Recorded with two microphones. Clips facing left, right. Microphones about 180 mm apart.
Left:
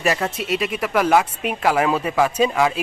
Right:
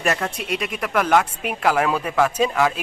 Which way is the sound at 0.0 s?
5° left (ahead or behind).